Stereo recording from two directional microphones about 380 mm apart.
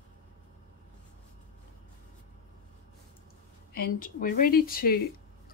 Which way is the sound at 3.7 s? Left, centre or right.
Left.